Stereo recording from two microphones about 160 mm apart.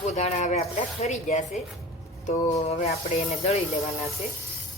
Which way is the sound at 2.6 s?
40° left (ahead or behind).